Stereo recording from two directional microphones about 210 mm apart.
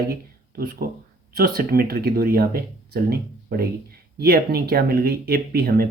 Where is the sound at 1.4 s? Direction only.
45° right (ahead or behind).